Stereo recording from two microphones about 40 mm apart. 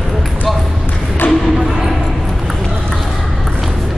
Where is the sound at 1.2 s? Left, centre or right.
Left.